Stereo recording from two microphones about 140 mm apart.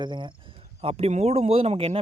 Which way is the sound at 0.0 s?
35° right (ahead or behind).